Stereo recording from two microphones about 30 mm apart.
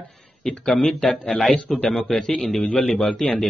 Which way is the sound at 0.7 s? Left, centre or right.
Left.